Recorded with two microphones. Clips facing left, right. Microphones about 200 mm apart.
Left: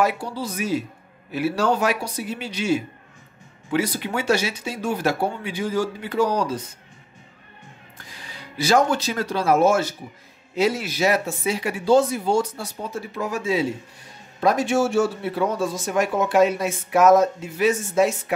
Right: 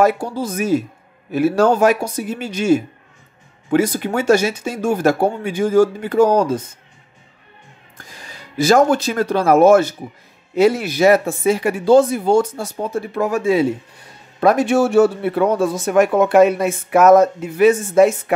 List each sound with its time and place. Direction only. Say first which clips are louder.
0.0 s speech: right 6 dB; 45° right (ahead or behind)
8.0 s speech: right 2 dB; 45° right (ahead or behind)